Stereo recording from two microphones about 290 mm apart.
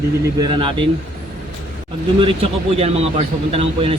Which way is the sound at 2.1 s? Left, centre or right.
Centre.